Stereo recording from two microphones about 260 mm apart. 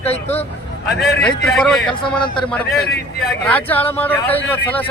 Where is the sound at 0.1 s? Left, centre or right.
Left.